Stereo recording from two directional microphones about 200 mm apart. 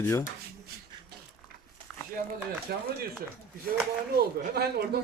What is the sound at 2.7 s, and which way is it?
Speech, 50° right (ahead or behind).